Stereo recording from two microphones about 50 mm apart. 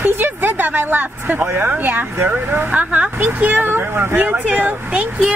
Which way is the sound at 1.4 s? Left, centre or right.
Right.